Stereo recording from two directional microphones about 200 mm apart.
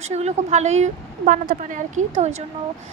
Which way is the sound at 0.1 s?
35° right (ahead or behind).